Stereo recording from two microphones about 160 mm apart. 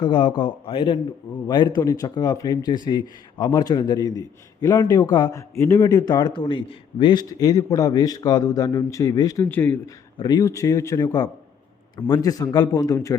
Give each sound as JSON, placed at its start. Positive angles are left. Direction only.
{"t": 0.0, "sound": "a man's voice", "side_deg": 30}
{"t": 10.2, "sound": "a man's voice", "side_deg": 25}